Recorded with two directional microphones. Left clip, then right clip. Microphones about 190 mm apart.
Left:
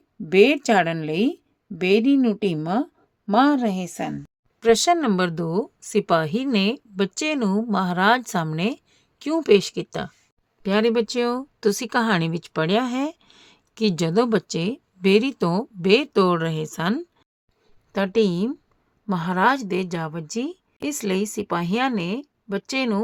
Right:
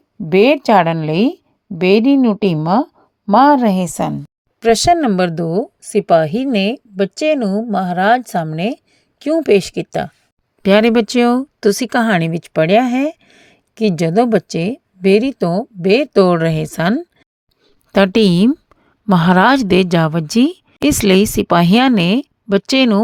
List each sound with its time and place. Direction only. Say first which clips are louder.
0.3 s a woman's voice: right 6 dB; 20° right (ahead or behind)
10.6 s speech: right 9 dB; 40° right (ahead or behind)
17.9 s a woman's voice: right 9 dB; 40° right (ahead or behind)